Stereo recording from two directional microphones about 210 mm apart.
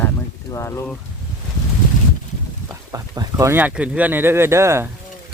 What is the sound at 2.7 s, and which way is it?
Speech, 15° right (ahead or behind).